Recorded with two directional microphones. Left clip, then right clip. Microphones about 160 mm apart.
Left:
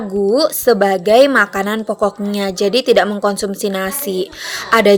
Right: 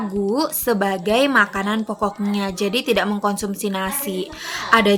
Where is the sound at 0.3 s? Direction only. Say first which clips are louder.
Left 9 dB; 35° left (ahead or behind).